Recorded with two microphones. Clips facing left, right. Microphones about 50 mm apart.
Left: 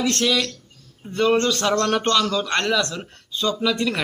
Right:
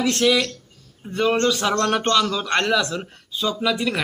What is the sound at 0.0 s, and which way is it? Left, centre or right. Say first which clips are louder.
A man's voice: right 2 dB; centre.